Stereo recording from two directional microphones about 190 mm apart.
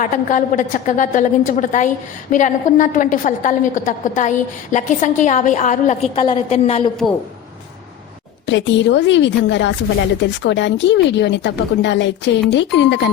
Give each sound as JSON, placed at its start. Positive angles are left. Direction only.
{"t": 0.0, "sound": "a woman's voice", "side_deg": 40}
{"t": 6.2, "sound": "a woman's voice", "side_deg": 30}
{"t": 8.4, "sound": "speech", "side_deg": 70}